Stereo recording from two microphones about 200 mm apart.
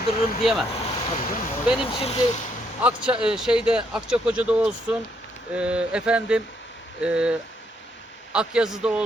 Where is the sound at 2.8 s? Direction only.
5° right (ahead or behind).